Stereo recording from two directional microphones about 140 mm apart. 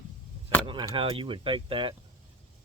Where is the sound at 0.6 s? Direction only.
35° right (ahead or behind).